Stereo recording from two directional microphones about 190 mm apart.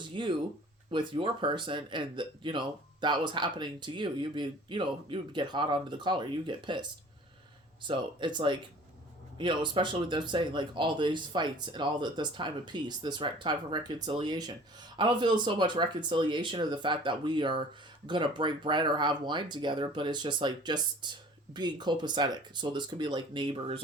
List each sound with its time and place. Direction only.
0.0 s speech: 25° right (ahead or behind)
7.9 s speech: 25° right (ahead or behind)